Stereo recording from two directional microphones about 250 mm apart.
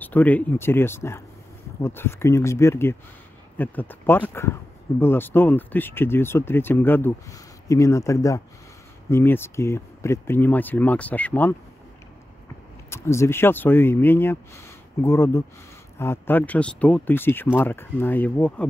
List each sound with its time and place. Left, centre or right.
0.0 s speech: centre
12.9 s speech: centre